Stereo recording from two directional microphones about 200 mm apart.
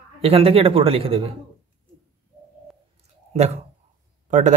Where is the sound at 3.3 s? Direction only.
35° right (ahead or behind).